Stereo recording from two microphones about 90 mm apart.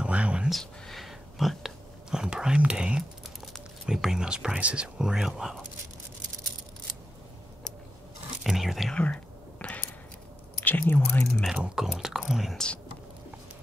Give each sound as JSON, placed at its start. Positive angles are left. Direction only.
{"t": 0.0, "sound": "a sound", "side_deg": -15}
{"t": 0.5, "sound": "a sound", "side_deg": 0}
{"t": 3.8, "sound": "speech", "side_deg": -5}
{"t": 8.5, "sound": "speech", "side_deg": -5}
{"t": 8.9, "sound": "whispering", "side_deg": 15}
{"t": 10.6, "sound": "speech", "side_deg": 20}
{"t": 11.4, "sound": "speech", "side_deg": -10}